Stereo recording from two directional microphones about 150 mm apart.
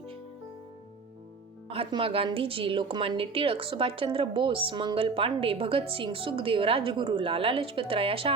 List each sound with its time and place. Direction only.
1.7 s a woman's voice: 35° right (ahead or behind)